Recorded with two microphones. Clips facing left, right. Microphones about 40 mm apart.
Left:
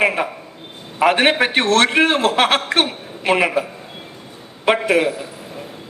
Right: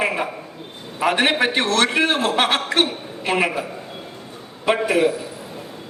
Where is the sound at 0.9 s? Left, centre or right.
Left.